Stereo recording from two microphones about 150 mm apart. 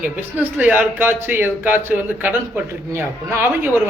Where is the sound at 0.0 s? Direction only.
10° right (ahead or behind).